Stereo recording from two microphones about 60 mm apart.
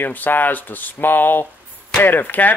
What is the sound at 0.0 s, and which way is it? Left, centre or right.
Speech, left.